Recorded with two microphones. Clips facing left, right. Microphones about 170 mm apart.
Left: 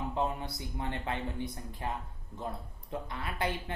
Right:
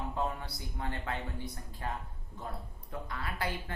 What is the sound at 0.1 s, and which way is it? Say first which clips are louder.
Speech: left 2 dB; 20° left (ahead or behind).